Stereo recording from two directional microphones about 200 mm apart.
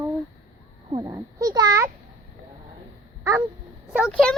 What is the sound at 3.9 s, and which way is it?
Speech, 5° right (ahead or behind).